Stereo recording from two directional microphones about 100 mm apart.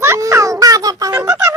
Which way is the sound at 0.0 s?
25° right (ahead or behind).